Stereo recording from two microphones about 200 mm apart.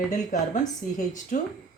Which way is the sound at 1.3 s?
40° left (ahead or behind).